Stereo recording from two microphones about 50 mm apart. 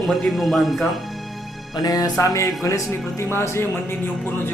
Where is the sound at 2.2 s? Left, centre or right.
Left.